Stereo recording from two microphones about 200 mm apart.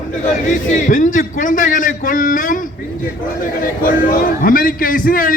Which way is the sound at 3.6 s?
45° left (ahead or behind).